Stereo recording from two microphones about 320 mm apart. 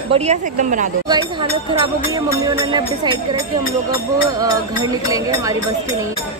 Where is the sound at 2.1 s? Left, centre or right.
Centre.